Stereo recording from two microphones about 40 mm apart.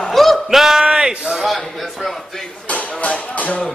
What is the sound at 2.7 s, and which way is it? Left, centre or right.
Music, left.